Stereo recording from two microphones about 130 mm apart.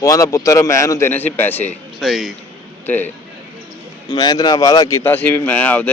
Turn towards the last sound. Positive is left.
turn(degrees=10)  # may be behind; listen again after turning